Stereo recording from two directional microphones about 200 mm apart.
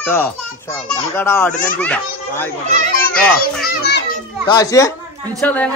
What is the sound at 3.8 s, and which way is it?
Children playing, 55° left (ahead or behind).